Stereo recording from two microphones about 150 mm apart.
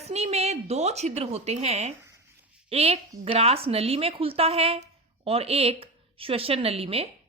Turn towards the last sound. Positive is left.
turn(degrees=-40)  # may be behind; listen again after turning